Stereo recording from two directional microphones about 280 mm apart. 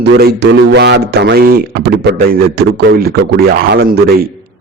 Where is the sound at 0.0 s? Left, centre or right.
Right.